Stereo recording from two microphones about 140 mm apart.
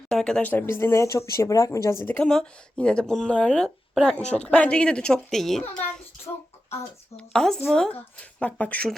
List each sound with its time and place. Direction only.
0.1 s speech: 5° left (ahead or behind); by 2.0 s 20° left (ahead or behind)
2.0 s speech: 10° left (ahead or behind)
7.2 s speech: 5° left (ahead or behind)